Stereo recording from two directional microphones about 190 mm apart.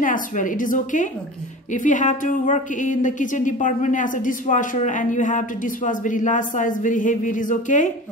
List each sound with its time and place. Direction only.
0.0 s a woman's voice: 45° left (ahead or behind)